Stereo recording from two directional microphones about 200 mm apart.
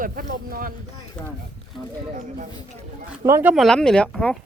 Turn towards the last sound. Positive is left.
turn(degrees=5)  # may be behind; listen again after turning